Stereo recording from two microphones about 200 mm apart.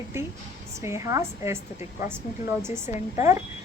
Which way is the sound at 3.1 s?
15° right (ahead or behind).